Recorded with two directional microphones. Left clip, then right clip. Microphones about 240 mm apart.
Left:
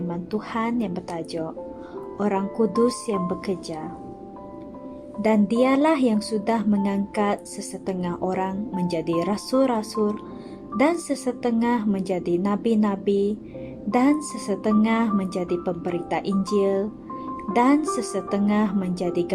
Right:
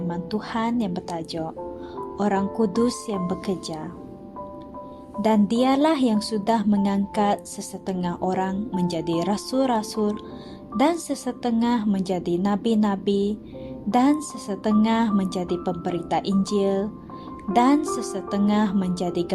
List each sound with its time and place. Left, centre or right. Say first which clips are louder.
0.1 s a woman's voice: right 1 dB; centre
5.2 s a woman's voice: left 1 dB; centre